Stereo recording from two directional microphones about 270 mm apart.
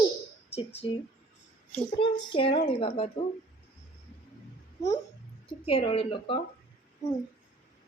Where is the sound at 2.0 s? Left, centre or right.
Centre.